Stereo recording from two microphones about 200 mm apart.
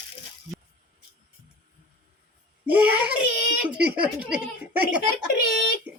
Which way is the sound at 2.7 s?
10° right (ahead or behind).